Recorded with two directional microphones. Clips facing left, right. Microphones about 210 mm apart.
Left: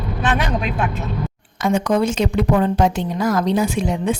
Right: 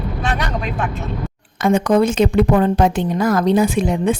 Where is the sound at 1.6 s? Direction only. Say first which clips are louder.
Right 3 dB; 55° right (ahead or behind).